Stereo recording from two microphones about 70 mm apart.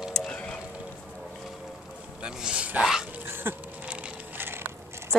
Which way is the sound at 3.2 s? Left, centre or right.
Right.